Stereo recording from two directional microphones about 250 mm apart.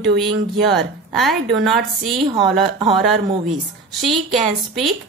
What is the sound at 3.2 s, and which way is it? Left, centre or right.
Speech, centre.